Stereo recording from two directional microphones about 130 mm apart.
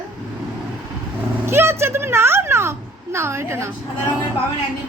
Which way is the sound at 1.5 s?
20° right (ahead or behind).